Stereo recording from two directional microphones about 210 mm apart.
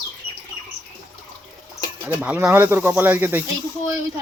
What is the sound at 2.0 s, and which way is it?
Speech, 5° right (ahead or behind).